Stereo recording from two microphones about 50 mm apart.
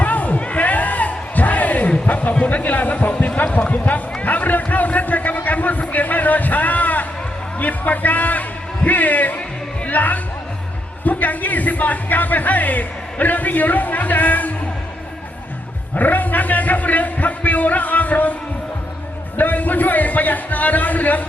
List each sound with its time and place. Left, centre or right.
0.0 s crowd: left
2.3 s speech: left
3.7 s a sound: left
7.6 s a man's voice: left
16.0 s speech: left
19.4 s speech: left